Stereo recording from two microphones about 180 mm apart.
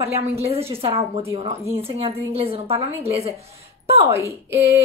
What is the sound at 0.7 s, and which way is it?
A woman's voice, 30° right (ahead or behind).